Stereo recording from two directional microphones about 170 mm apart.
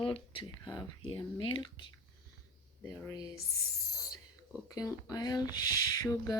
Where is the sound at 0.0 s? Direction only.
30° left (ahead or behind).